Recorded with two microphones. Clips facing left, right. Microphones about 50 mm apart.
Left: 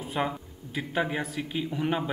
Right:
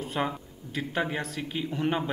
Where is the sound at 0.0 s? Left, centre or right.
Centre.